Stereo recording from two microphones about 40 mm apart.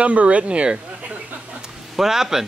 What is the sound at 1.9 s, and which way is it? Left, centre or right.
Speech, centre.